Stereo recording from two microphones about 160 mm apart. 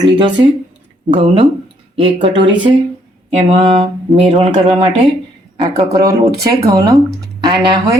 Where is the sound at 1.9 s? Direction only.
30° right (ahead or behind).